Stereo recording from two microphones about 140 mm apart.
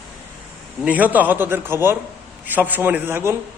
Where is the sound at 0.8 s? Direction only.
10° right (ahead or behind).